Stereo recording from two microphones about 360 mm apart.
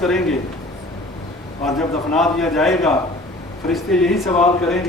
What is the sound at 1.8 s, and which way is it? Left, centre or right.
A man's voice, centre.